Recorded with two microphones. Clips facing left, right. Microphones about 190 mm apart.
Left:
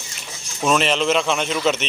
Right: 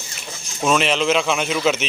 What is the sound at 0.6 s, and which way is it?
A man's voice, centre (ahead or behind).